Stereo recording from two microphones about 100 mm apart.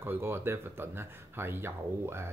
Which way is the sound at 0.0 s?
25° right (ahead or behind).